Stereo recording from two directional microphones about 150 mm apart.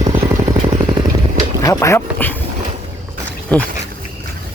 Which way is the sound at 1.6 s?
20° left (ahead or behind).